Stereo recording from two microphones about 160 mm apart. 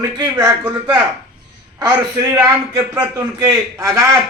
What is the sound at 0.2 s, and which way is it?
Speech, 20° right (ahead or behind).